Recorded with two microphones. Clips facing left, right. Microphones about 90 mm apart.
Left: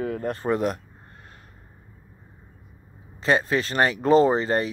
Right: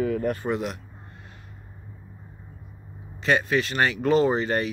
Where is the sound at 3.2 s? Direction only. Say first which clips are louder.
Left 1 dB; 35° left (ahead or behind).